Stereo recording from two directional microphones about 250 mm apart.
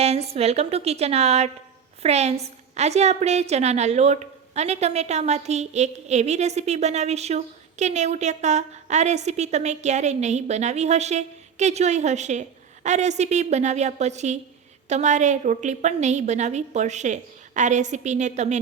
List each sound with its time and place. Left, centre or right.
0.0 s a woman's voice: right